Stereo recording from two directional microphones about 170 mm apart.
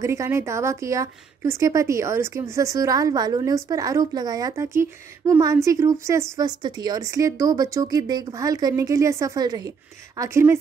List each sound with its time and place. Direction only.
0.0 s a woman's voice: 15° right (ahead or behind)